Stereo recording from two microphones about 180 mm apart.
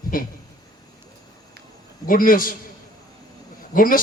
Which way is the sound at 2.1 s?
50° left (ahead or behind).